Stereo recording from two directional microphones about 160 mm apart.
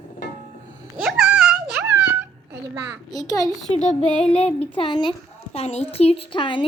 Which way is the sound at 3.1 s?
20° left (ahead or behind).